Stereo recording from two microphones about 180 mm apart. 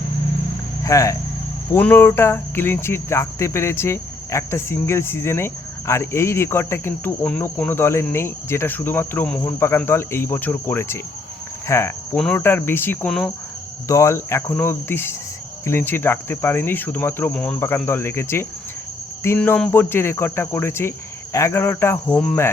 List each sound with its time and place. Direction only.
0.9 s speech: 15° left (ahead or behind)